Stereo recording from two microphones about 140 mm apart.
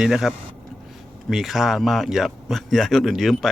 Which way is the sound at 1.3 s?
Centre (ahead or behind).